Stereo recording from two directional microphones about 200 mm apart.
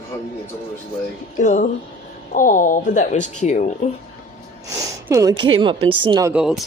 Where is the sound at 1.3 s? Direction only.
40° left (ahead or behind).